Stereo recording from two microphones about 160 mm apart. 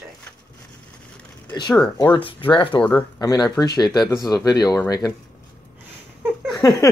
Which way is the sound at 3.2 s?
25° left (ahead or behind).